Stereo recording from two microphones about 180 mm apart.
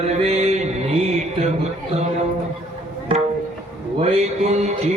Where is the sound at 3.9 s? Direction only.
35° right (ahead or behind).